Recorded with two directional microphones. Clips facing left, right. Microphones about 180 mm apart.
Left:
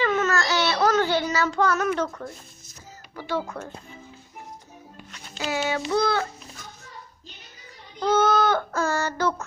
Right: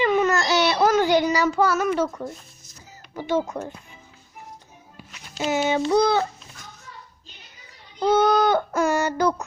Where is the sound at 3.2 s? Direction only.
20° right (ahead or behind).